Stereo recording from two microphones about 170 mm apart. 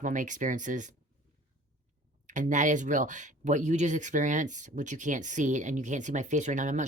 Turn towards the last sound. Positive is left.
turn(degrees=-45)  # may be behind; listen again after turning